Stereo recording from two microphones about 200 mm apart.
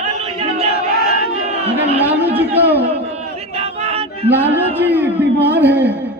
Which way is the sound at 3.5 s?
30° right (ahead or behind).